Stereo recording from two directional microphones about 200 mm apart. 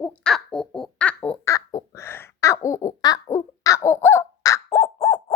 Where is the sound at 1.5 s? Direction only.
15° left (ahead or behind).